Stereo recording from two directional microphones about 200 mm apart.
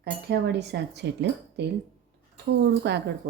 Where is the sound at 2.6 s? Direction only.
60° right (ahead or behind).